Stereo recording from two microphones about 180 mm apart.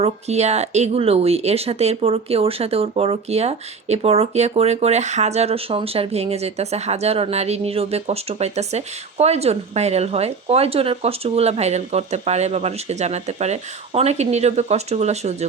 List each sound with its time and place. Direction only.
0.0 s speech: 35° right (ahead or behind)